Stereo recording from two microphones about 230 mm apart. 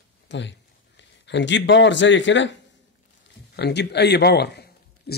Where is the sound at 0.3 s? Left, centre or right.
Left.